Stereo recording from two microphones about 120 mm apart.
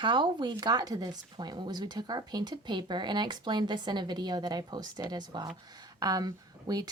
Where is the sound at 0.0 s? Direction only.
40° right (ahead or behind).